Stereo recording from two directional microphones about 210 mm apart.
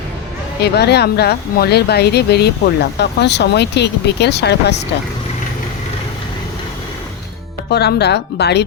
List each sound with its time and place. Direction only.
0.6 s speech: 50° left (ahead or behind)
7.7 s speech: 50° left (ahead or behind)